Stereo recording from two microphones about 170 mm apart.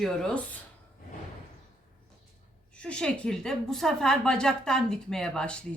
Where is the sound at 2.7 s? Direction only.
5° left (ahead or behind).